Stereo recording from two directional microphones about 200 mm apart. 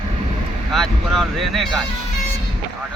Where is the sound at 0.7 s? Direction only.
Centre (ahead or behind).